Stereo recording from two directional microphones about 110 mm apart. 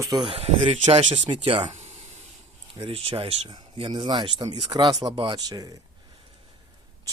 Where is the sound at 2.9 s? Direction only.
60° right (ahead or behind); by 5.8 s 35° right (ahead or behind).